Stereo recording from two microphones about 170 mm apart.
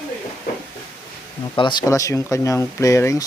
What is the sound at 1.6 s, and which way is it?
Speech, 25° left (ahead or behind).